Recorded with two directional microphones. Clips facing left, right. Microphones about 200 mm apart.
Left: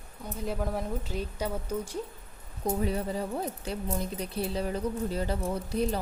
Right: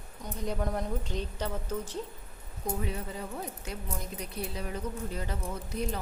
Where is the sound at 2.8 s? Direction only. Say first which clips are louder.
Left 6 dB; 35° left (ahead or behind).